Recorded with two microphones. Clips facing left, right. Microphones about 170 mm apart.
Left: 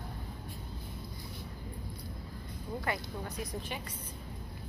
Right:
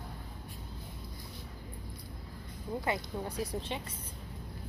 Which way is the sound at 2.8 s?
25° right (ahead or behind).